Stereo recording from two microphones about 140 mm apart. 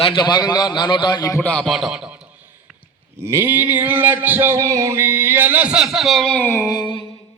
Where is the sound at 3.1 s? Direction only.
20° right (ahead or behind); by 6.6 s 15° left (ahead or behind).